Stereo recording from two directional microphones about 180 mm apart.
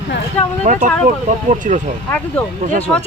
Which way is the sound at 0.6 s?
45° right (ahead or behind).